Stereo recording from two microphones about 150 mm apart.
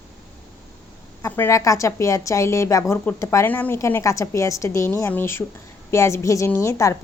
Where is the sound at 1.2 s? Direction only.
20° left (ahead or behind).